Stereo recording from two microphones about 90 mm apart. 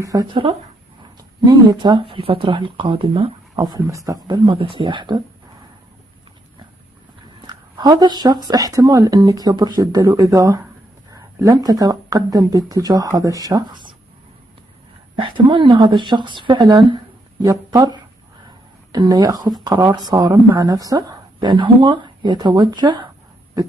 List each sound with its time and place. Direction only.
0.0 s speech: 40° right (ahead or behind)
1.4 s speech: 50° right (ahead or behind); by 3.3 s 85° right
3.5 s speech: 50° right (ahead or behind)
3.9 s speech: 35° right (ahead or behind)
4.3 s a woman's voice: 70° right (ahead or behind)
7.4 s speech: 50° right (ahead or behind)
11.1 s a sound: 40° right (ahead or behind)
12.3 s speech: 45° right (ahead or behind)
15.1 s a woman's voice: 65° right (ahead or behind)
17.5 s speech: 40° right (ahead or behind)